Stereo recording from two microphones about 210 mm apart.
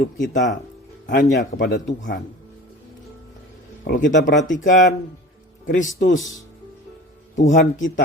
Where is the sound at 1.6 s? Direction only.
55° left (ahead or behind).